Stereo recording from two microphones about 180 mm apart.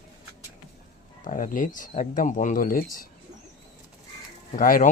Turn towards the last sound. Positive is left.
turn(degrees=50)  # may be behind; listen again after turning